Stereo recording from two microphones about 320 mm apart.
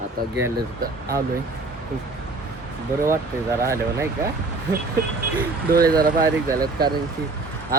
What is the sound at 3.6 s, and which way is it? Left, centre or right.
Speech, centre.